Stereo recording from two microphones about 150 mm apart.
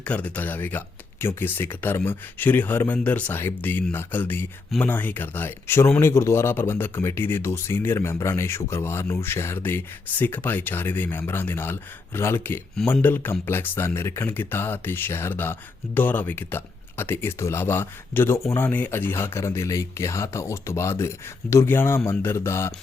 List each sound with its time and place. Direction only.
0.0 s speech: 10° left (ahead or behind)